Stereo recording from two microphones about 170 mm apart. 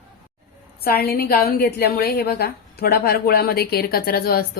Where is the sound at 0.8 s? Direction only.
65° left (ahead or behind).